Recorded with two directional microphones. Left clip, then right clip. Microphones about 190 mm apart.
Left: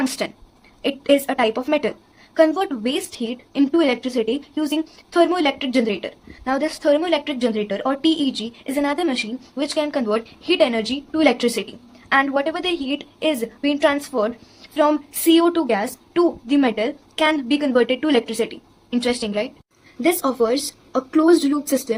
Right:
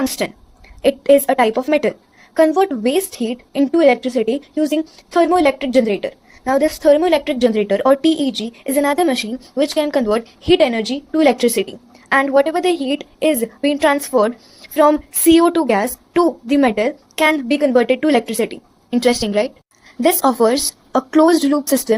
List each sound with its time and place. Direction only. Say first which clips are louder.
0.0 s a woman's voice: right 3 dB; 20° right (ahead or behind)